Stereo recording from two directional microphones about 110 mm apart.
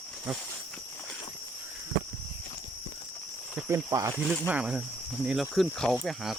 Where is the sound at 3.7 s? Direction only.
25° right (ahead or behind).